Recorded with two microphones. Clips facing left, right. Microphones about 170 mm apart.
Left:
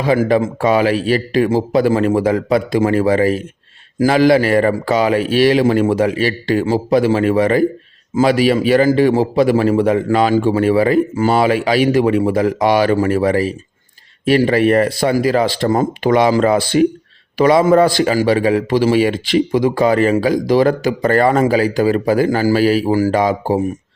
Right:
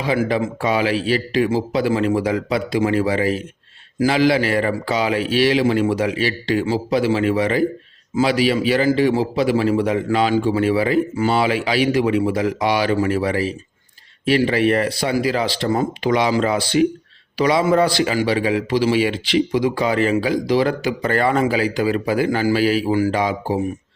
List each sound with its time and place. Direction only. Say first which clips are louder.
0.0 s a man's voice: left 5 dB; 45° left (ahead or behind)